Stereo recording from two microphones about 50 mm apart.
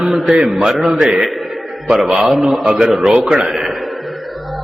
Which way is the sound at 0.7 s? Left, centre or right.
Centre.